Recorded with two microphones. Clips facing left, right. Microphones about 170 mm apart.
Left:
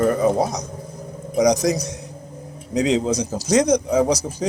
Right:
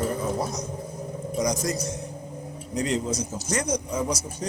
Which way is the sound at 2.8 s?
90° left.